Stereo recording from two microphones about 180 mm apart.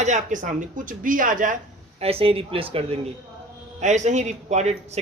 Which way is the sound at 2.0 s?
30° right (ahead or behind).